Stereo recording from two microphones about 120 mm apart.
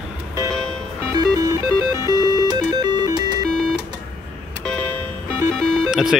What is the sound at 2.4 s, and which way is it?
Music, 35° right (ahead or behind).